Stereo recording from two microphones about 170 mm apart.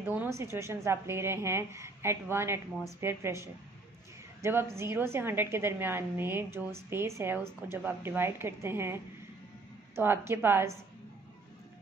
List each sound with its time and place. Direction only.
0.0 s a woman's voice: 10° right (ahead or behind)